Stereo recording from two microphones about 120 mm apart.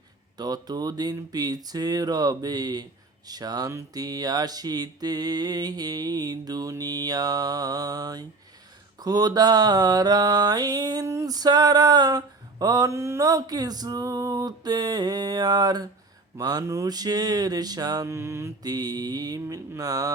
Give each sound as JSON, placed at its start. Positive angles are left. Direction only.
{"t": 0.3, "sound": "mantra", "side_deg": -35}